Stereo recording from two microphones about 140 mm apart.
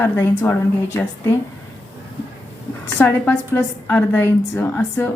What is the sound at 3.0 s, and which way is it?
A woman's voice, 15° left (ahead or behind).